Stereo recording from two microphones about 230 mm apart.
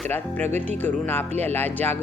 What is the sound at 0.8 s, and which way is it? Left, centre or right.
Music, centre.